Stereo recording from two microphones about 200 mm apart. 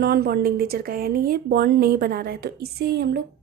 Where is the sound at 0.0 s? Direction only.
50° right (ahead or behind).